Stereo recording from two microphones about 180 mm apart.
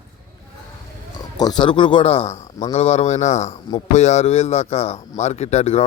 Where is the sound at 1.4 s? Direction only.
25° left (ahead or behind).